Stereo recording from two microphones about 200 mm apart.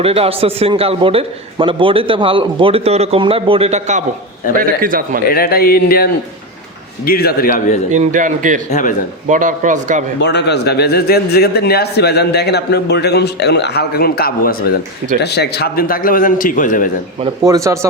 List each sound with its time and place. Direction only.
0.0 s a man's voice: 30° right (ahead or behind); by 5.2 s 45° right (ahead or behind)
5.3 s a man's voice: 50° left (ahead or behind)
7.9 s a man's voice: 40° right (ahead or behind)
8.7 s speech: 40° left (ahead or behind)
9.2 s a man's voice: 40° right (ahead or behind)
10.2 s a man's voice: 60° left (ahead or behind); by 16.9 s 40° left (ahead or behind)
17.4 s speech: 15° right (ahead or behind)